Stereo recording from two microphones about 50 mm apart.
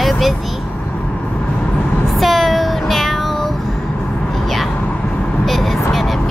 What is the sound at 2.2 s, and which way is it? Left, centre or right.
Child singing, centre.